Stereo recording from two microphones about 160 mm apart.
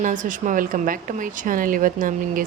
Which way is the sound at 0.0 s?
55° right (ahead or behind).